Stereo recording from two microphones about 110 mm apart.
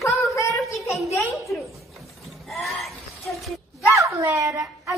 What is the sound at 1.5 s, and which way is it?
Speech, centre (ahead or behind).